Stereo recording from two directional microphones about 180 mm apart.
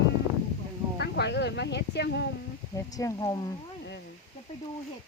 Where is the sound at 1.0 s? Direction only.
65° left (ahead or behind).